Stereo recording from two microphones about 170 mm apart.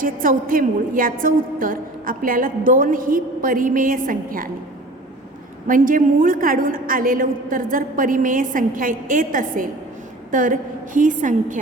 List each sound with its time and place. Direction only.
0.0 s a woman's voice: 55° right (ahead or behind)
5.6 s a woman's voice: 55° right (ahead or behind)